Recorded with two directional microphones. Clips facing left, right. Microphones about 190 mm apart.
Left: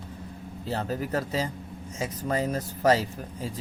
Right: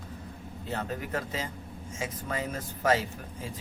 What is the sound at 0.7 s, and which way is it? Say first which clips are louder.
Speech: left 4 dB; 35° left (ahead or behind).